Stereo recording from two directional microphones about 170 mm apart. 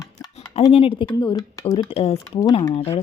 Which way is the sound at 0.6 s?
30° left (ahead or behind).